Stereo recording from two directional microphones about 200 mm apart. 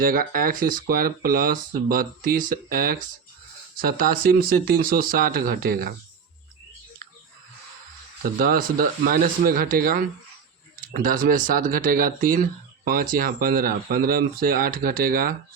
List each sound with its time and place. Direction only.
0.0 s speech: 45° right (ahead or behind)
8.2 s speech: 45° right (ahead or behind)